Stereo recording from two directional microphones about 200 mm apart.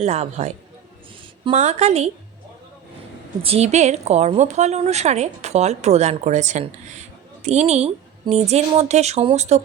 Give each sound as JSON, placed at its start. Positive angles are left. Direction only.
{"t": 0.0, "sound": "a woman's voice", "side_deg": -30}
{"t": 3.4, "sound": "a woman's voice", "side_deg": -30}